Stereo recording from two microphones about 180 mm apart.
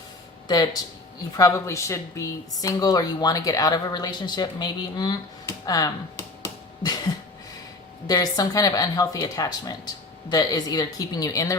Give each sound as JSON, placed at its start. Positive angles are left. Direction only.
{"t": 0.4, "sound": "speech", "side_deg": 20}
{"t": 8.0, "sound": "speech", "side_deg": 20}